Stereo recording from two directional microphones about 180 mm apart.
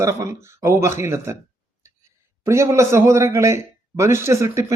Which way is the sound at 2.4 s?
15° right (ahead or behind).